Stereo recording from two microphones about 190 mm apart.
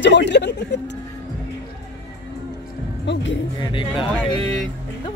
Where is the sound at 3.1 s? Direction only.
70° left (ahead or behind).